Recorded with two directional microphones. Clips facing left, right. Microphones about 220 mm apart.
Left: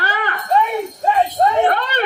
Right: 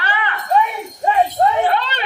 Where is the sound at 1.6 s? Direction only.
50° left (ahead or behind).